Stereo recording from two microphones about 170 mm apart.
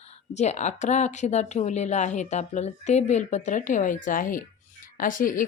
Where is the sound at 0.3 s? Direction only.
45° left (ahead or behind).